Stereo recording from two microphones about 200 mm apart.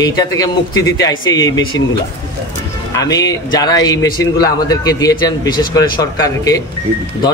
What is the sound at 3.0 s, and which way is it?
A man's voice, 15° left (ahead or behind).